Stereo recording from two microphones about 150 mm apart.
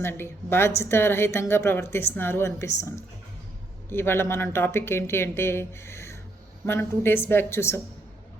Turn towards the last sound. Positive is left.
turn(degrees=15)  # may be behind; listen again after turning